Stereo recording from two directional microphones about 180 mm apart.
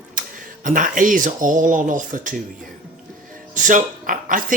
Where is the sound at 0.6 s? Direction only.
45° right (ahead or behind).